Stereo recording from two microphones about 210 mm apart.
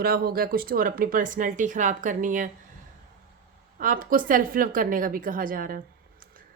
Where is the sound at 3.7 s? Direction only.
40° right (ahead or behind).